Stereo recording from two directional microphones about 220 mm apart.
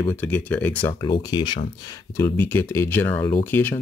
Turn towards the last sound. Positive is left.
turn(degrees=10)  # may be behind; listen again after turning